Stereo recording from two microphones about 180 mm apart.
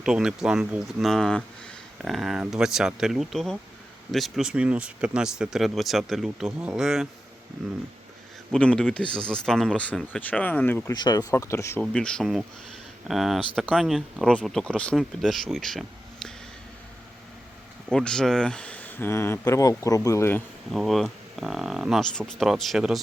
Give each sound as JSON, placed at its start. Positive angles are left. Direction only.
{"t": 0.0, "sound": "speech", "side_deg": -5}
{"t": 8.5, "sound": "speech", "side_deg": 5}
{"t": 10.9, "sound": "speech", "side_deg": 20}
{"t": 11.8, "sound": "speech", "side_deg": 5}
{"t": 17.9, "sound": "speech", "side_deg": 5}
{"t": 20.7, "sound": "speech", "side_deg": 0}